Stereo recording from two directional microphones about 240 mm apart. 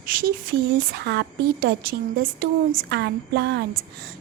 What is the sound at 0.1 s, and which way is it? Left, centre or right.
Speech, right.